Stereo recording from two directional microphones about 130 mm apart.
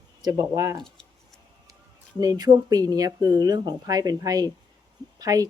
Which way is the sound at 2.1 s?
30° right (ahead or behind).